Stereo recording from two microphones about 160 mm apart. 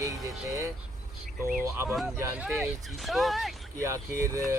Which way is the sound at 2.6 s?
Centre (ahead or behind).